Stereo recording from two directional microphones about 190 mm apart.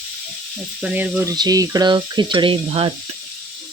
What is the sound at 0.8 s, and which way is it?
Speech, 10° right (ahead or behind).